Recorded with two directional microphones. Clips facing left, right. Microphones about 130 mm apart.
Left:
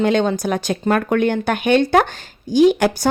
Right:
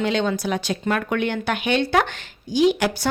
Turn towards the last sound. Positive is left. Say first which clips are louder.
# left 5 dB
turn(degrees=45)  # may be behind; listen again after turning